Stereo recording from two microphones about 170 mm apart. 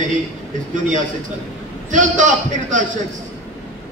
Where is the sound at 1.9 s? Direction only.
50° right (ahead or behind).